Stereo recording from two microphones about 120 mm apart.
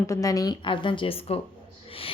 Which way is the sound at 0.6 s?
45° left (ahead or behind).